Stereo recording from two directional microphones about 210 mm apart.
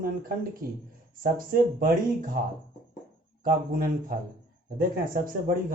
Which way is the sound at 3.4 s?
45° right (ahead or behind).